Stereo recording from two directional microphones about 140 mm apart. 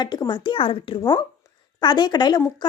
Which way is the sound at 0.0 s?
30° left (ahead or behind).